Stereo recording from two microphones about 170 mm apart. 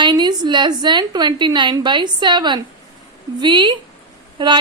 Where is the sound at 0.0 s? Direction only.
25° right (ahead or behind).